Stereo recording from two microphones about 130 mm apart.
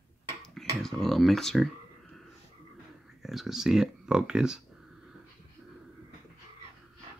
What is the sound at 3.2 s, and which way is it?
Speech, centre (ahead or behind).